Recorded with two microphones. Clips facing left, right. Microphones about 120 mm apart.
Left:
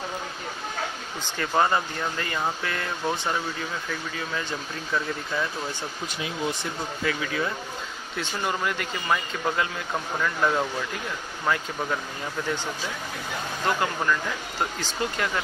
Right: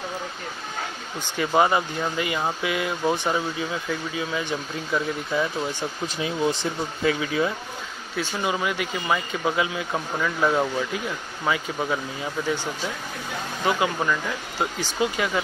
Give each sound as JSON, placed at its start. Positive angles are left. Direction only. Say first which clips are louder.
{"t": 1.4, "sound": "speech", "louder": "right 3 dB", "side_deg": -10}
{"t": 6.2, "sound": "speech", "louder": "right 5 dB", "side_deg": -30}
{"t": 8.2, "sound": "speech", "louder": "right 2 dB", "side_deg": -5}
{"t": 13.7, "sound": "speech", "louder": "right 2 dB", "side_deg": -10}